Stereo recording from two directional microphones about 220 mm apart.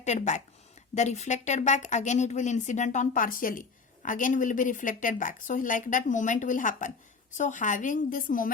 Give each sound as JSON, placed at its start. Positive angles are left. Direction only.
{"t": 0.0, "sound": "speech", "side_deg": 30}